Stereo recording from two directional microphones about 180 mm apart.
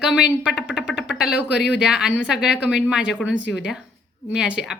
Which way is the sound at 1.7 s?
5° right (ahead or behind).